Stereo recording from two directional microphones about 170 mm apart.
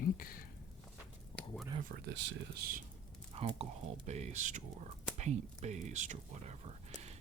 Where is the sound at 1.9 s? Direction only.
90° right; by 2.8 s 65° right (ahead or behind).